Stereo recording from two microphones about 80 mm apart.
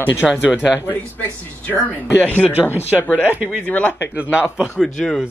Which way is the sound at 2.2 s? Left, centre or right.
Right.